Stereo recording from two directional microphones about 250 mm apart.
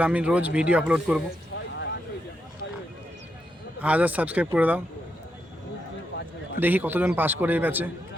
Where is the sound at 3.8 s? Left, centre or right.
Centre.